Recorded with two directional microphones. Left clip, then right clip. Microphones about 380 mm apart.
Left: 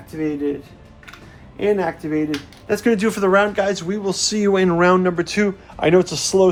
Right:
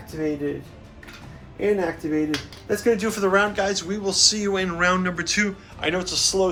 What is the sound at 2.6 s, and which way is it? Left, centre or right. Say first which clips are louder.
Speech: left 3 dB; centre.